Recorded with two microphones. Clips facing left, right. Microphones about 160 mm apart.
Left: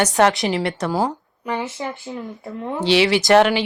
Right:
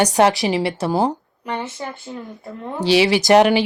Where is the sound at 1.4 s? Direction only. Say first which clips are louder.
Left 2 dB; 10° left (ahead or behind).